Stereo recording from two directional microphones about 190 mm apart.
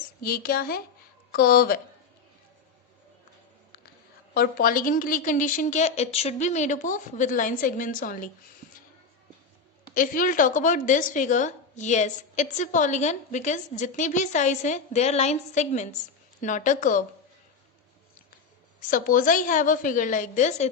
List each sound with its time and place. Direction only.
0.2 s a woman's voice: 50° left (ahead or behind)
4.4 s a woman's voice: 50° left (ahead or behind)
9.9 s a woman's voice: 45° left (ahead or behind)
18.9 s a woman's voice: 45° left (ahead or behind)